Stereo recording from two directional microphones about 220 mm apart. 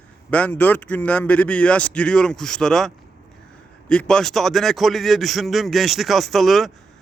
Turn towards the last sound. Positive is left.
turn(degrees=0)  # may be behind; listen again after turning